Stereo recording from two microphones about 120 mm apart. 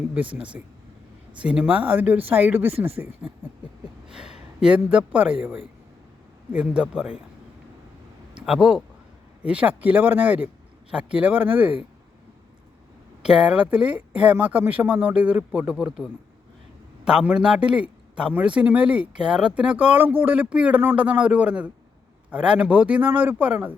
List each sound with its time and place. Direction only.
0.1 s speech: 10° right (ahead or behind)
4.1 s speech: 5° right (ahead or behind)
8.4 s speech: 5° right (ahead or behind)
13.2 s speech: 5° right (ahead or behind)
17.1 s speech: 10° right (ahead or behind)